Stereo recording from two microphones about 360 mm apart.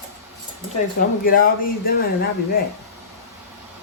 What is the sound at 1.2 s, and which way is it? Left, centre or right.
Speech, left.